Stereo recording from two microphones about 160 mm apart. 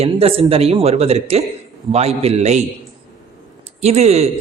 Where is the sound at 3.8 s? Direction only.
45° right (ahead or behind).